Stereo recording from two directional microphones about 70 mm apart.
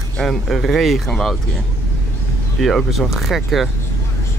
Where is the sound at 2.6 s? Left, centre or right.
Centre.